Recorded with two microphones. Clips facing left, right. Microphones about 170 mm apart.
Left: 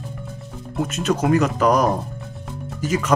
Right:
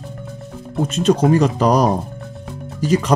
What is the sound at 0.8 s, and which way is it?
Speech, 30° right (ahead or behind).